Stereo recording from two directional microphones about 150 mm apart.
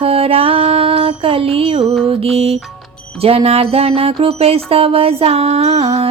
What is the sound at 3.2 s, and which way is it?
Music, 40° right (ahead or behind).